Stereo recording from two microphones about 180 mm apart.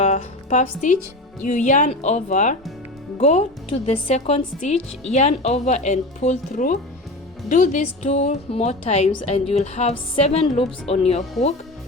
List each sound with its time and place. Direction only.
0.0 s music: 40° left (ahead or behind)
1.5 s a woman's voice: 45° left (ahead or behind)